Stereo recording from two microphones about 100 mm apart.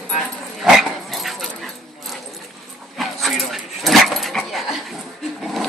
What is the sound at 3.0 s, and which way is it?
Dog, centre (ahead or behind).